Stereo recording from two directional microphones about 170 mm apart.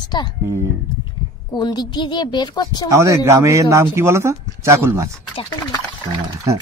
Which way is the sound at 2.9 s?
20° right (ahead or behind).